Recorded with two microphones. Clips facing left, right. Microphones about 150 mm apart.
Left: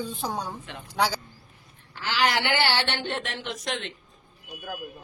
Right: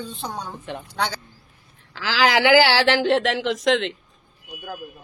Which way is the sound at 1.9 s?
90° right.